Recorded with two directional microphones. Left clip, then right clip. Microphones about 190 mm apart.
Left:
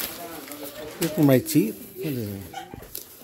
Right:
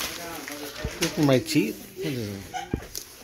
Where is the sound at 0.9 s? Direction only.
40° left (ahead or behind).